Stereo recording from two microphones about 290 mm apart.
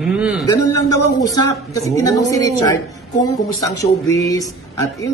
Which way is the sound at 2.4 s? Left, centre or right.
Centre.